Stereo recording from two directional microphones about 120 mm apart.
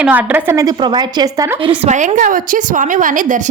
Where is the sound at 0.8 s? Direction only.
35° right (ahead or behind).